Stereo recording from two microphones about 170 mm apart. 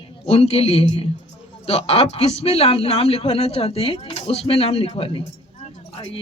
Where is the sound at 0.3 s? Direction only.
35° left (ahead or behind).